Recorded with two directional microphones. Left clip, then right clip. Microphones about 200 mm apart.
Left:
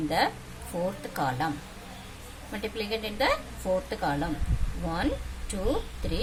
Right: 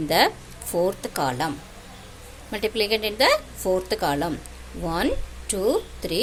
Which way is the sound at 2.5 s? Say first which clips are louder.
Right 9 dB; 50° right (ahead or behind).